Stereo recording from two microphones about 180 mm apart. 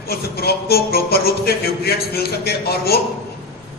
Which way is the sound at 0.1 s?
60° left (ahead or behind).